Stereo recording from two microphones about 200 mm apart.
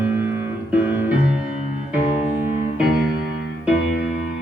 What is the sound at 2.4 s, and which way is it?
Music, 40° right (ahead or behind).